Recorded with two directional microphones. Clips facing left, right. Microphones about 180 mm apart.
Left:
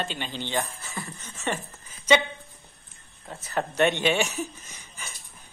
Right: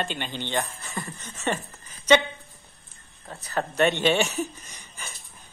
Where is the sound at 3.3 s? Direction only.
Centre (ahead or behind).